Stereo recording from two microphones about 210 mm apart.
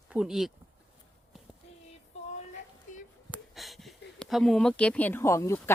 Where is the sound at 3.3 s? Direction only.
Centre (ahead or behind).